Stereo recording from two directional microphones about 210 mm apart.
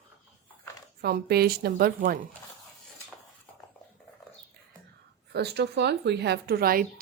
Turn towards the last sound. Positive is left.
turn(degrees=-45)  # may be behind; listen again after turning